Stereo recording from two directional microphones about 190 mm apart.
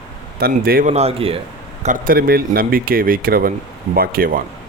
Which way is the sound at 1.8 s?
45° right (ahead or behind).